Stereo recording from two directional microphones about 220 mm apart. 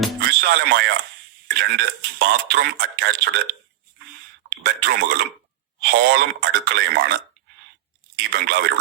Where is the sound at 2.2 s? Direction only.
50° right (ahead or behind).